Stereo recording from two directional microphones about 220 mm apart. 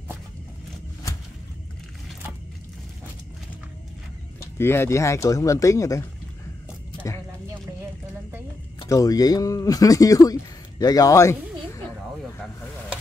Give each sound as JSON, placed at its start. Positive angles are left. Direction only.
{"t": 4.4, "sound": "speech", "side_deg": 10}
{"t": 8.7, "sound": "speech", "side_deg": 15}